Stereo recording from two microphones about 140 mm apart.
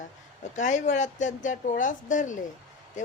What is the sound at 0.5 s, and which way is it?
Speech, 60° left (ahead or behind).